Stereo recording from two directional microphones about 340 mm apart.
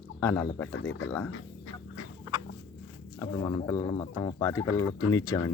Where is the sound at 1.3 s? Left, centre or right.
Left.